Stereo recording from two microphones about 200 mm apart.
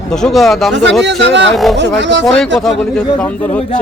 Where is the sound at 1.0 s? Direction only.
60° right (ahead or behind).